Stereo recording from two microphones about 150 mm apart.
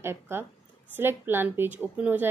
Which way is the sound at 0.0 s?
15° right (ahead or behind).